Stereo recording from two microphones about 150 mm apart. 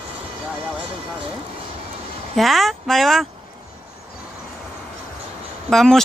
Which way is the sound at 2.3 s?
Centre (ahead or behind).